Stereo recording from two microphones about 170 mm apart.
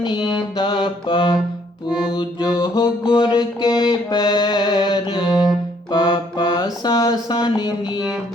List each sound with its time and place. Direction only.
0.0 s music: 25° left (ahead or behind)
5.9 s mantra: 25° left (ahead or behind)